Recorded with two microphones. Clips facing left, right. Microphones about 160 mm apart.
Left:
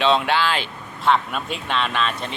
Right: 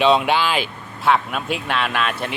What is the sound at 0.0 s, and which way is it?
Speech, 15° right (ahead or behind).